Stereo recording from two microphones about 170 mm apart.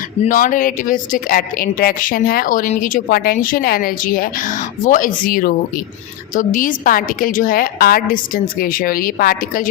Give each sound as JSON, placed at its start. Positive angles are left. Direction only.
{"t": 0.3, "sound": "speech", "side_deg": 50}